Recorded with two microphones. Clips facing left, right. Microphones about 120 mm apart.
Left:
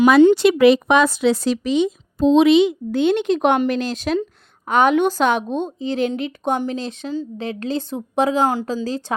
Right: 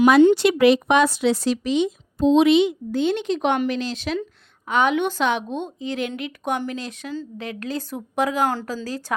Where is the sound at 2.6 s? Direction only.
65° left (ahead or behind).